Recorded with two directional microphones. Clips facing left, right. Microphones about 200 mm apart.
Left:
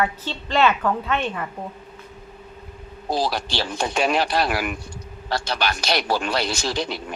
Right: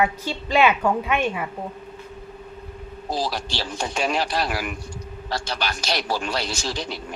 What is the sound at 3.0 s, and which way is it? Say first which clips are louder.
Speech: left 3 dB; 65° left (ahead or behind).